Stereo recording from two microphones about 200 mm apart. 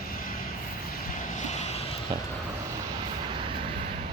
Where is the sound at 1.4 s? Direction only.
35° left (ahead or behind).